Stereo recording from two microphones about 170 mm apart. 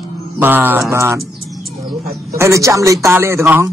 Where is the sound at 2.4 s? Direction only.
20° right (ahead or behind).